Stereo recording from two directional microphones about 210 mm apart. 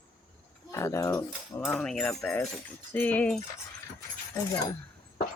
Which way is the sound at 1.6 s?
5° left (ahead or behind).